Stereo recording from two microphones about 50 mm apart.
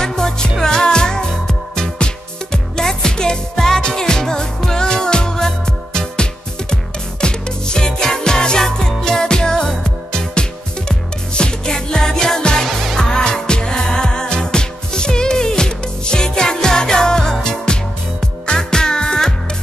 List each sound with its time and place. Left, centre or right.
0.0 s music: centre